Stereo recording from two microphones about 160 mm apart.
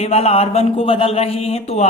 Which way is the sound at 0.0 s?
40° left (ahead or behind).